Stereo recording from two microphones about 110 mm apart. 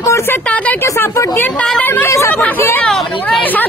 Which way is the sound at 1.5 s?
5° left (ahead or behind).